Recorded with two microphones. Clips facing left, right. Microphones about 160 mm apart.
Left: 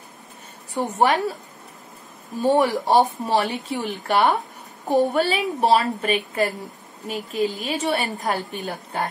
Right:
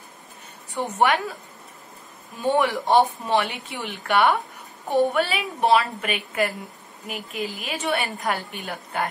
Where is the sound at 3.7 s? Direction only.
40° left (ahead or behind).